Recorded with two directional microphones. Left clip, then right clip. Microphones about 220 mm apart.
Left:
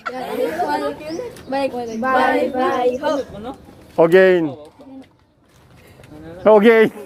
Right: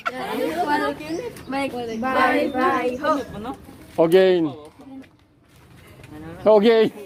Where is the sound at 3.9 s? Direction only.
10° left (ahead or behind).